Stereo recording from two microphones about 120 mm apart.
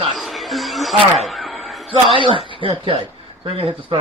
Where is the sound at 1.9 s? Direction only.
50° right (ahead or behind).